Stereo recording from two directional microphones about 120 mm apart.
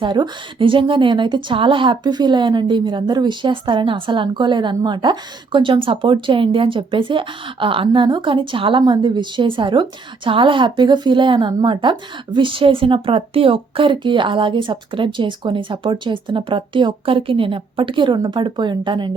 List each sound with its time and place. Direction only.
0.0 s a woman's voice: 40° right (ahead or behind)